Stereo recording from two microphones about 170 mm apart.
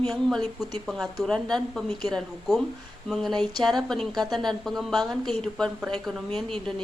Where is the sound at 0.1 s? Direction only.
Centre (ahead or behind).